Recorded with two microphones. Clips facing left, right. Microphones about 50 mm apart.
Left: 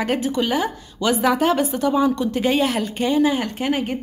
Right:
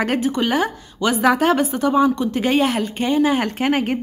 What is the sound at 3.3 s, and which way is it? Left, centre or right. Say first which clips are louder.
Speech: right 3 dB; right.